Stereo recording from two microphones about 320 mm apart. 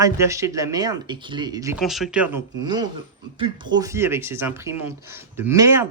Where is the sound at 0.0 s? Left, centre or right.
Centre.